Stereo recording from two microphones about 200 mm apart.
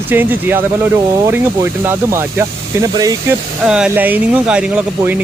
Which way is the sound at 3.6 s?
5° right (ahead or behind).